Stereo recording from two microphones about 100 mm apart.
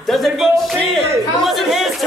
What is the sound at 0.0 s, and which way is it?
Speech, centre (ahead or behind).